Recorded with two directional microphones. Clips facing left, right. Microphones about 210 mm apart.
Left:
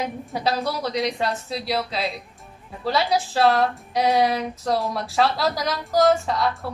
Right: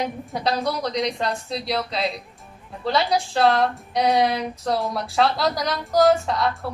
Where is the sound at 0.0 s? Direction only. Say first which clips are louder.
Even; 5° left (ahead or behind).